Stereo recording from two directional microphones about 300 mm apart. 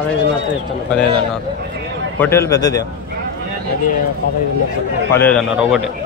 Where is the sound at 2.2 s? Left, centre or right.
Centre.